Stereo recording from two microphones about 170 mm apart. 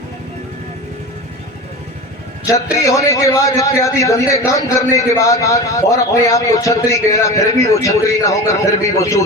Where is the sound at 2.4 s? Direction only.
20° left (ahead or behind).